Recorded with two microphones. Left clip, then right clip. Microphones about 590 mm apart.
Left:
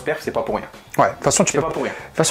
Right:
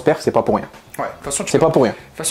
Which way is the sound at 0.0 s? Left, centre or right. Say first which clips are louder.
Right 7 dB; right.